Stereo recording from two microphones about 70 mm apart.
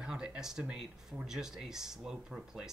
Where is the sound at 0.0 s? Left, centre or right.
Centre.